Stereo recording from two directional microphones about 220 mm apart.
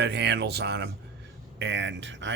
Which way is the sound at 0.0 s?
50° right (ahead or behind).